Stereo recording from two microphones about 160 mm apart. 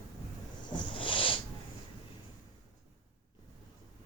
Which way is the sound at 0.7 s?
30° left (ahead or behind).